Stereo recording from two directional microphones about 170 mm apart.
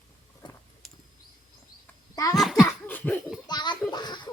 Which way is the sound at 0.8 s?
Centre (ahead or behind).